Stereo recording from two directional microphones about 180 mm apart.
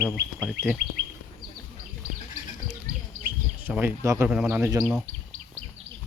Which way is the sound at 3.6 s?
10° right (ahead or behind).